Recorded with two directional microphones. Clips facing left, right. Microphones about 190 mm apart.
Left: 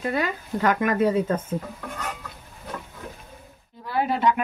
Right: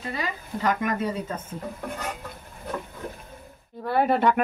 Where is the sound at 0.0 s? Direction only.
55° left (ahead or behind).